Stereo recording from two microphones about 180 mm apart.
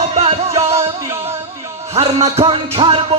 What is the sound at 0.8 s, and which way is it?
Music, 15° right (ahead or behind).